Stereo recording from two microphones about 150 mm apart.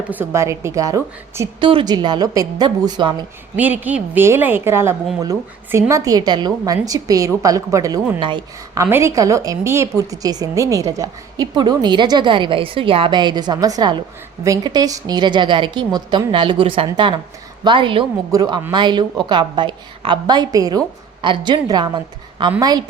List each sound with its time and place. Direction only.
0.1 s a woman's voice: 15° right (ahead or behind)
3.5 s a woman's voice: 10° right (ahead or behind); by 8.8 s 30° right (ahead or behind)
8.8 s a woman's voice: 20° right (ahead or behind)